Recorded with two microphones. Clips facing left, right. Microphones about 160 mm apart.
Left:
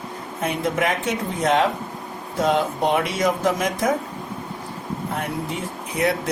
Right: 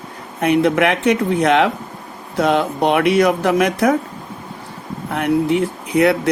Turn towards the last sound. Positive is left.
turn(degrees=-65)  # may be behind; listen again after turning